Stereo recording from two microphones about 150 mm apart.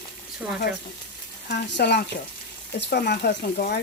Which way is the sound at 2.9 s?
90° left.